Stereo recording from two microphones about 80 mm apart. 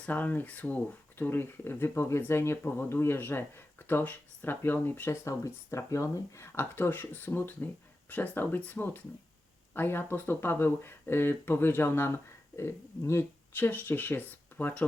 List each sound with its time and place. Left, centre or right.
0.0 s speech: left
5.2 s speech: left